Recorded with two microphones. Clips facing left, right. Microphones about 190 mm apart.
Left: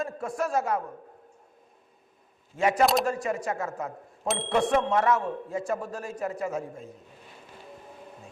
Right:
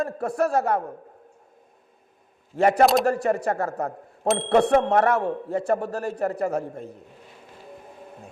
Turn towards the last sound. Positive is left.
turn(degrees=-65)  # may be behind; listen again after turning